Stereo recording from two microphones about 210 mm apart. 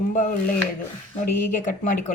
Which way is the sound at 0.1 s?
40° left (ahead or behind).